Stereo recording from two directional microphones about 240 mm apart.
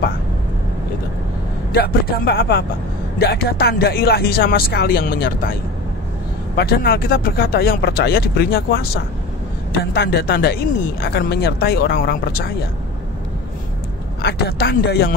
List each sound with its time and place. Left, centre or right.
1.7 s speech: left
6.5 s speech: left
14.2 s speech: left